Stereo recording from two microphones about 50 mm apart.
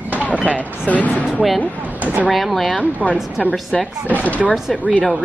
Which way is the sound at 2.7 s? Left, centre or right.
Left.